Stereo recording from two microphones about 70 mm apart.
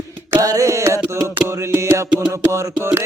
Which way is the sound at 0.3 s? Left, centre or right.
Right.